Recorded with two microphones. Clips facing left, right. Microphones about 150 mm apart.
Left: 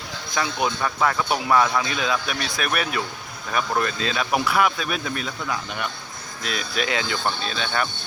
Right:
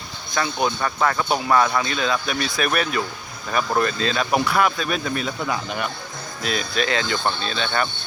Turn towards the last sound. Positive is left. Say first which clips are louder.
# right 2 dB
turn(degrees=5)  # may be behind; listen again after turning